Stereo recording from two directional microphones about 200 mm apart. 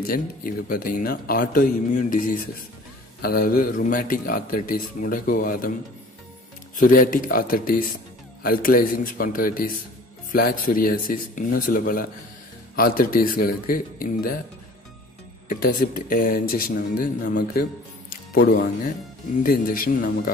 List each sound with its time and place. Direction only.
0.0 s speech: 45° left (ahead or behind)
6.8 s speech: 45° left (ahead or behind)
15.4 s speech: 45° left (ahead or behind)
18.1 s music: 45° left (ahead or behind)
19.4 s speech: 45° left (ahead or behind)